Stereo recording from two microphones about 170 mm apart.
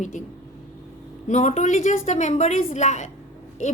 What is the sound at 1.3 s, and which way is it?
A woman's voice, 45° left (ahead or behind).